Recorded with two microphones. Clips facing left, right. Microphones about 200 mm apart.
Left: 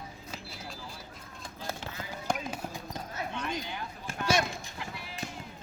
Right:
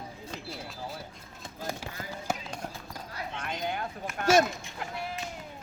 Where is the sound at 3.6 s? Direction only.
55° right (ahead or behind).